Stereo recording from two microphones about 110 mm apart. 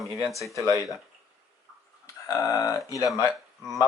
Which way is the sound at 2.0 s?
30° left (ahead or behind).